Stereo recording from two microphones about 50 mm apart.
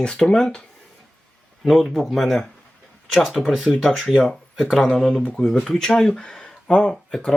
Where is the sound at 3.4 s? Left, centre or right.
Centre.